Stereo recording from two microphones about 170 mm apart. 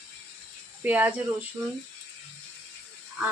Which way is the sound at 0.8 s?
10° right (ahead or behind).